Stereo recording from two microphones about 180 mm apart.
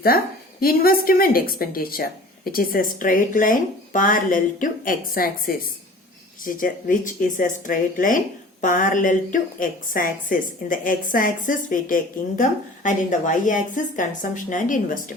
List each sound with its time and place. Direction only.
0.6 s a woman's voice: 55° left (ahead or behind)